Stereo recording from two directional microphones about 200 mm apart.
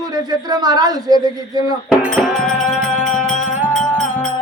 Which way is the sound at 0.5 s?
20° right (ahead or behind).